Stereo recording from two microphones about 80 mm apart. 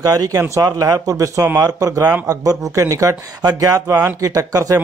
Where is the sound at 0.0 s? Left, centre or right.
Right.